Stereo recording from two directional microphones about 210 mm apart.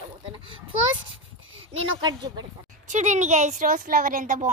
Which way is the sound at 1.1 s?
70° right (ahead or behind).